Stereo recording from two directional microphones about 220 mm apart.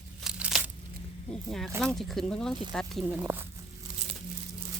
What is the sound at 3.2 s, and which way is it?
Speech, 10° right (ahead or behind).